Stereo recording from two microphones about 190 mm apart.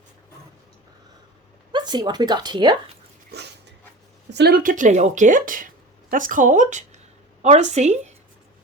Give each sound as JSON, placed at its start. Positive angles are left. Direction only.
{"t": 1.7, "sound": "speech", "side_deg": -20}
{"t": 3.3, "sound": "dog", "side_deg": -60}
{"t": 4.3, "sound": "a woman's voice", "side_deg": -60}